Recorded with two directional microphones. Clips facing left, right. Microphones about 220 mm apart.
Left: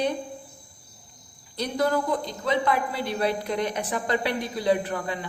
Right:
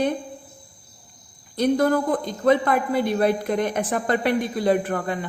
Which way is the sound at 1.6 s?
50° right (ahead or behind).